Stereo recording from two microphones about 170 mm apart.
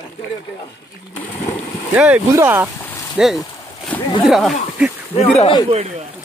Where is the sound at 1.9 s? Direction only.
10° right (ahead or behind).